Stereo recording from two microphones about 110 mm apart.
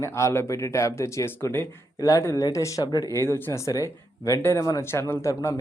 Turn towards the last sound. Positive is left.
turn(degrees=30)  # may be behind; listen again after turning